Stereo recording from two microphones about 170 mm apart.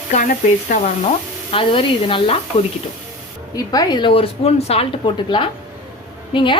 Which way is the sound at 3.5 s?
20° left (ahead or behind).